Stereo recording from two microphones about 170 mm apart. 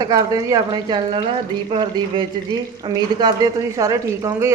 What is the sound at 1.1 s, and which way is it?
Speech, 35° right (ahead or behind).